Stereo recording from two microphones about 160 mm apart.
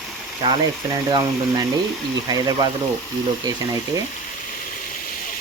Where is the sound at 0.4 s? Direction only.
30° right (ahead or behind).